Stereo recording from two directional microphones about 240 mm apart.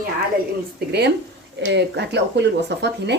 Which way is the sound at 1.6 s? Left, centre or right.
Right.